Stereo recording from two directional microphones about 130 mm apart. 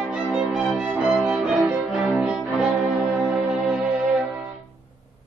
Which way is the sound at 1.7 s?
Centre (ahead or behind).